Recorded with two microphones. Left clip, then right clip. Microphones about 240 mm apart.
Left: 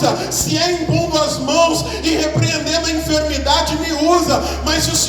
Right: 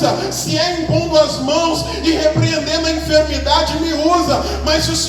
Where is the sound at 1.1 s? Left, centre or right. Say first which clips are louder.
Right 4 dB; left.